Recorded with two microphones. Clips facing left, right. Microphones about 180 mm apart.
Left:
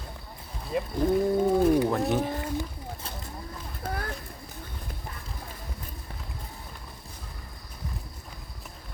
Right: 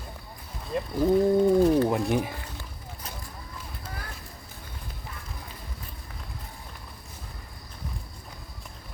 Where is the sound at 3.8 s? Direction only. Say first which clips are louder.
Left 9 dB; 60° left (ahead or behind).